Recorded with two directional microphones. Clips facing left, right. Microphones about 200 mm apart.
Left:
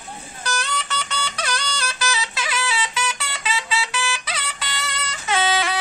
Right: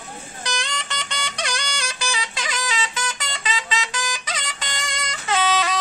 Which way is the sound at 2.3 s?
10° left (ahead or behind).